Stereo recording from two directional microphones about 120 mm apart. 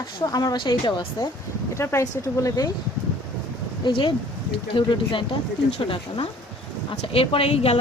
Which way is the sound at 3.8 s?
40° left (ahead or behind).